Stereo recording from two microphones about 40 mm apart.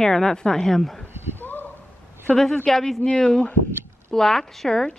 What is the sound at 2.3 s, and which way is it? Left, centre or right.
Speech, left.